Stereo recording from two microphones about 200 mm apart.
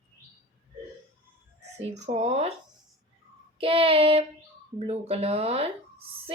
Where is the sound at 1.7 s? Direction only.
35° right (ahead or behind).